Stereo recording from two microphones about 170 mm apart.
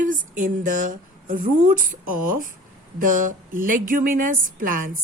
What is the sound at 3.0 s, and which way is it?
A woman's voice, 50° right (ahead or behind).